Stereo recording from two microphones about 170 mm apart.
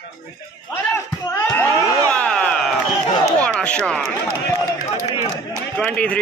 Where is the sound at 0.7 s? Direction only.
15° left (ahead or behind).